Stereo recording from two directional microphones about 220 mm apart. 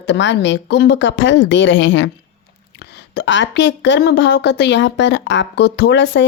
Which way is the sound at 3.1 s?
55° left (ahead or behind).